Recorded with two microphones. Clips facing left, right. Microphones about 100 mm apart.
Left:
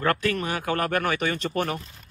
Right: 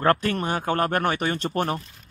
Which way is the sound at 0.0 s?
35° right (ahead or behind).